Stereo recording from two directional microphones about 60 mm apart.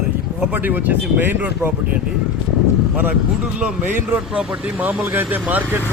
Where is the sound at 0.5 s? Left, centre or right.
Right.